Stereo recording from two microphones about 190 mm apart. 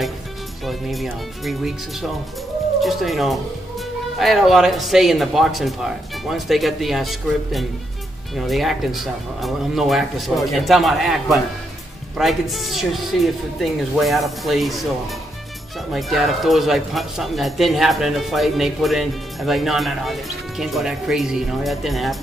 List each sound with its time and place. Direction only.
0.7 s speech: centre (ahead or behind)
15.9 s speech: centre (ahead or behind)